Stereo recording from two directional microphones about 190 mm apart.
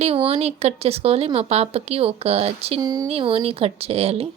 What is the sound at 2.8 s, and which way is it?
Speech, 20° right (ahead or behind).